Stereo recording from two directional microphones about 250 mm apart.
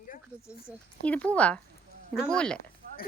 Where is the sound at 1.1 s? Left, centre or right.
Centre.